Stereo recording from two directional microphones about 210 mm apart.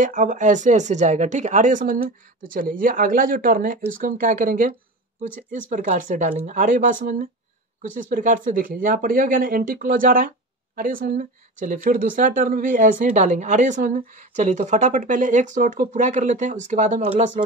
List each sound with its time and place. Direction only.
0.0 s speech: 40° right (ahead or behind)